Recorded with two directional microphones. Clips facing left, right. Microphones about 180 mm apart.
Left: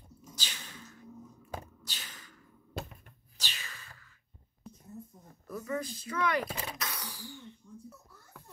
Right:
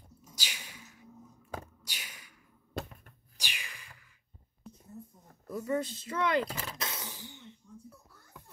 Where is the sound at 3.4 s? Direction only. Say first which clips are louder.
Even; 15° right (ahead or behind).